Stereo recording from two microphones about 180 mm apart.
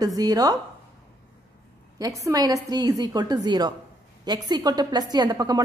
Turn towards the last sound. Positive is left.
turn(degrees=-20)  # may be behind; listen again after turning